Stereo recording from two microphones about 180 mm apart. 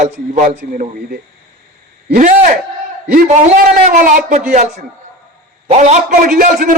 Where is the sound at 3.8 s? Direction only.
50° right (ahead or behind).